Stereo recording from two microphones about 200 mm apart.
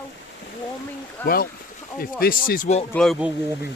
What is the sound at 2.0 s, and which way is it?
Speech, 50° left (ahead or behind).